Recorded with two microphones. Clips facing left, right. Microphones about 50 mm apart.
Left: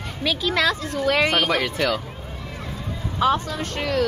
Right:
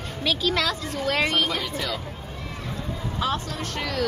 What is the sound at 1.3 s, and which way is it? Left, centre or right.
Speech, left.